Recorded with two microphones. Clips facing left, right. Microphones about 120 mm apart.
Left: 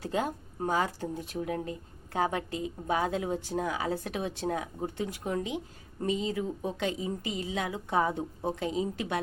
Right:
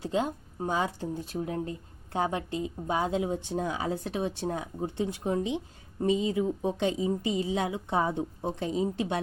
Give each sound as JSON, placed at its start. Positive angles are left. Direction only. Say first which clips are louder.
{"t": 0.0, "sound": "speech", "louder": "right 2 dB", "side_deg": -20}